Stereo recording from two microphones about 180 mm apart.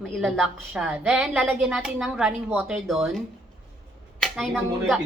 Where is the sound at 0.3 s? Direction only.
5° right (ahead or behind).